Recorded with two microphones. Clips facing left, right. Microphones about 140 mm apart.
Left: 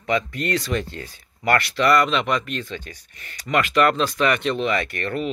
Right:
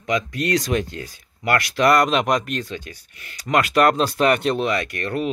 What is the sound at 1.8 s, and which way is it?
Speech, 45° right (ahead or behind).